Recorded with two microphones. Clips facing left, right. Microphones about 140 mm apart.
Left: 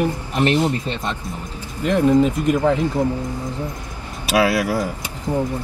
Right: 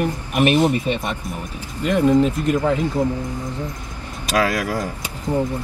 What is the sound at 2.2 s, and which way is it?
Speech, 10° left (ahead or behind).